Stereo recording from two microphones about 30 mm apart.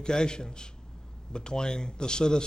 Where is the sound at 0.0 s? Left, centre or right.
Left.